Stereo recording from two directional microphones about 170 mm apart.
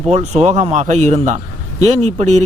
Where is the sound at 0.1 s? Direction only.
40° right (ahead or behind).